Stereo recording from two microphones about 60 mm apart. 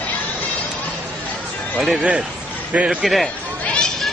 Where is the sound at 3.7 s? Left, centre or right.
Centre.